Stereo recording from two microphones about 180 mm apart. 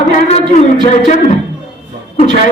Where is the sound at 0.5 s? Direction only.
40° left (ahead or behind).